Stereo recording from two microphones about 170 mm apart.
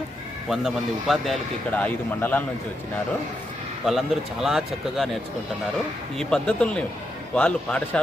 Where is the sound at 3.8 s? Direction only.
Centre (ahead or behind).